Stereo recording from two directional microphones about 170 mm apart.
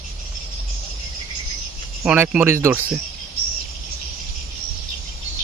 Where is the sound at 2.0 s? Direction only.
10° right (ahead or behind).